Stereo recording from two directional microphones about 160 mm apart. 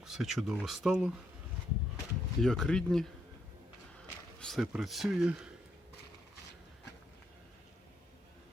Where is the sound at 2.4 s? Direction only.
5° left (ahead or behind).